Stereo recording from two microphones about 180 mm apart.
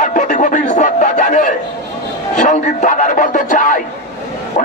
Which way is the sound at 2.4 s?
45° left (ahead or behind).